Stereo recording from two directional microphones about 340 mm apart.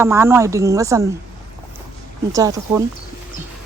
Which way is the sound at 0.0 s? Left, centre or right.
Centre.